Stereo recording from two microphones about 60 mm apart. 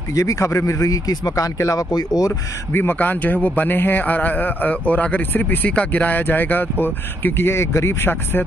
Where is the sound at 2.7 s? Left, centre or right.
Left.